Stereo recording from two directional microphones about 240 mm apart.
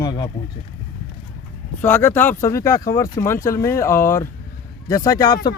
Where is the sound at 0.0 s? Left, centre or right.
Centre.